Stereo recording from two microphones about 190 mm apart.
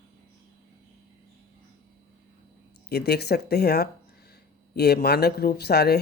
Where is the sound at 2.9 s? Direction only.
55° left (ahead or behind).